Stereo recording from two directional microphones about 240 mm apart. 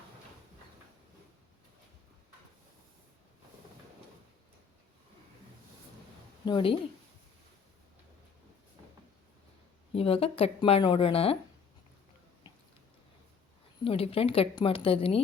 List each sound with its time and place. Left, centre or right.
6.4 s a woman's voice: left
9.9 s speech: left
13.8 s speech: left